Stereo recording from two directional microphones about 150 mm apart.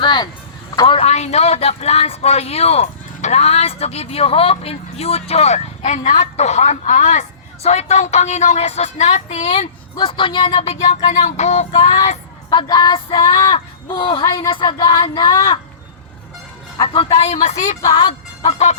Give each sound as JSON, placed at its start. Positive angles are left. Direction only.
{"t": 0.0, "sound": "child singing", "side_deg": 30}
{"t": 0.8, "sound": "speech", "side_deg": 35}
{"t": 10.1, "sound": "speech", "side_deg": 35}
{"t": 12.0, "sound": "child singing", "side_deg": 35}
{"t": 16.7, "sound": "speech", "side_deg": 35}
{"t": 17.8, "sound": "child singing", "side_deg": 25}
{"t": 18.4, "sound": "speech", "side_deg": 45}